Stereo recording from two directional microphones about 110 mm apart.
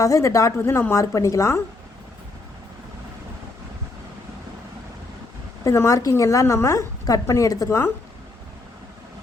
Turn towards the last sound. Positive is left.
turn(degrees=25)  # may be behind; listen again after turning